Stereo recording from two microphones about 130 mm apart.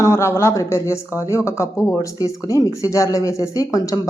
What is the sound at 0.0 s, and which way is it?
Speech, 20° left (ahead or behind).